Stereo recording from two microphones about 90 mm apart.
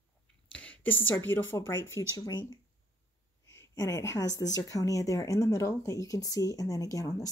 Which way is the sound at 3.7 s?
40° left (ahead or behind).